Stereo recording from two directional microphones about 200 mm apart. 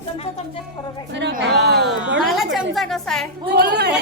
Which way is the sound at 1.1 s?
60° right (ahead or behind).